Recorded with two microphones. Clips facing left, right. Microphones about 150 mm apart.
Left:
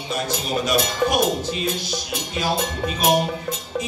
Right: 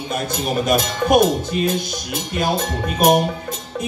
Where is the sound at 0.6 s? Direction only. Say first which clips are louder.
Right 1 dB; 50° right (ahead or behind).